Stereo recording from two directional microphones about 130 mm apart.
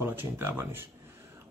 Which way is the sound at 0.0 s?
15° right (ahead or behind).